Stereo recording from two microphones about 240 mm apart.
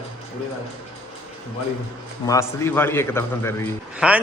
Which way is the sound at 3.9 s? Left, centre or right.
Centre.